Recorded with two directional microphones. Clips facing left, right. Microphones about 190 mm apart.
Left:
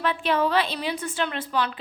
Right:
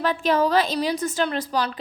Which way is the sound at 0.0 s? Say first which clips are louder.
Right 3 dB; 40° right (ahead or behind).